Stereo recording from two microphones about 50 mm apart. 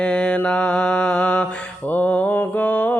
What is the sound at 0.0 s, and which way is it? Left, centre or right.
Mantra, centre.